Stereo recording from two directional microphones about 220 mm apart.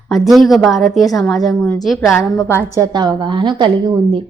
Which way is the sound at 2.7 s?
15° right (ahead or behind).